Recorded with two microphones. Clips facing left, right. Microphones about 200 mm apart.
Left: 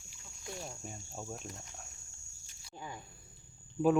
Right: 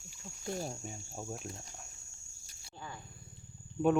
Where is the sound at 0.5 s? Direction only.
35° right (ahead or behind).